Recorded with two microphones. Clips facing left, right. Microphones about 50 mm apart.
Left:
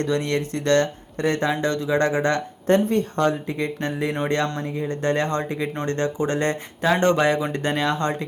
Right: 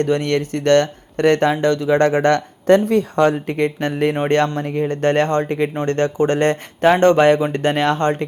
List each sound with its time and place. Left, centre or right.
0.0 s speech: right
1.2 s speech: right
2.6 s speech: right
3.6 s speech: right
5.4 s speech: right
6.9 s speech: right